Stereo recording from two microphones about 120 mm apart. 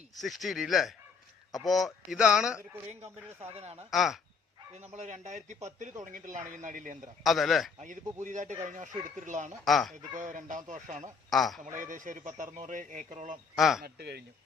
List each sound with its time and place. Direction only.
0.2 s speech: centre (ahead or behind)
3.5 s speech: 60° right (ahead or behind)
3.9 s speech: centre (ahead or behind)
4.7 s speech: 70° right (ahead or behind); by 7.1 s 90° right
7.3 s speech: centre (ahead or behind)
7.8 s speech: 90° right
9.6 s speech: centre (ahead or behind)
10.2 s speech: 90° right
11.3 s speech: centre (ahead or behind)
11.7 s speech: 90° right
13.6 s speech: centre (ahead or behind)